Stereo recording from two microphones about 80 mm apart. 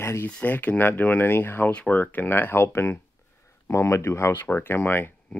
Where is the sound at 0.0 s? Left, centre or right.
Left.